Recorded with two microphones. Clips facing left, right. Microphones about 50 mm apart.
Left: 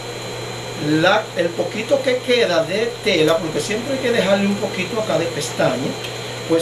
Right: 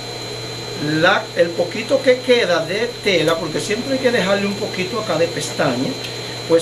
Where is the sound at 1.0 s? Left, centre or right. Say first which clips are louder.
Right 4 dB; centre.